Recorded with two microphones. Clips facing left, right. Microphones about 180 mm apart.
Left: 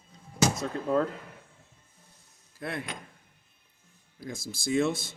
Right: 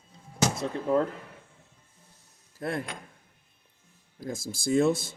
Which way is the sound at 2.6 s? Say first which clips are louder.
Right 4 dB; 45° right (ahead or behind).